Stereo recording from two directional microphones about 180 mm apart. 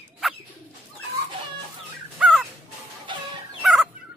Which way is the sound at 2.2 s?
Centre (ahead or behind).